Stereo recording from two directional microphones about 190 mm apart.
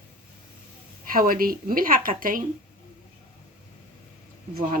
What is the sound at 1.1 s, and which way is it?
Speech, 50° right (ahead or behind).